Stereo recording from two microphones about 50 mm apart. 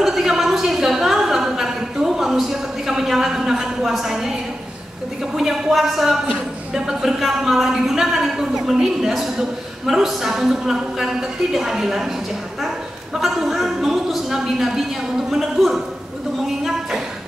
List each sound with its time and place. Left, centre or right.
0.0 s a sound: centre
5.2 s a woman's voice: centre
6.7 s speech: centre
7.1 s a woman's voice: centre
13.2 s a woman's voice: centre